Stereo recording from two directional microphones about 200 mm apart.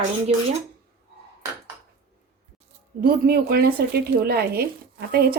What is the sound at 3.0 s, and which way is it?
Speech, 50° right (ahead or behind).